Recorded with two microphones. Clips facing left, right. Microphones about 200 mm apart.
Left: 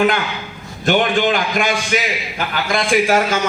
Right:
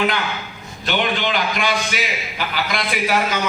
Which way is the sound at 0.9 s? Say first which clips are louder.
Left 6 dB; 45° left (ahead or behind).